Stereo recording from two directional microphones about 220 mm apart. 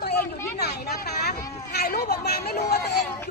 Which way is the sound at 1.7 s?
45° left (ahead or behind).